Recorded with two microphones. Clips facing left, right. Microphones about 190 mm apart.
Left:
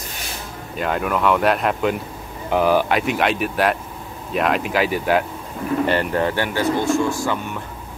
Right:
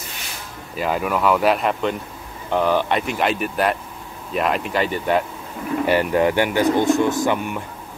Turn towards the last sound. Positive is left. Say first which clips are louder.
# right 3 dB
turn(degrees=-20)  # may be behind; listen again after turning